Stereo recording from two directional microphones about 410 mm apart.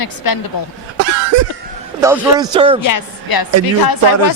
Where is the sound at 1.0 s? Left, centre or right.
Right.